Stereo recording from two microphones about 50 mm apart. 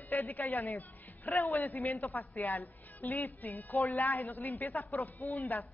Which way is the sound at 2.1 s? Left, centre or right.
Left.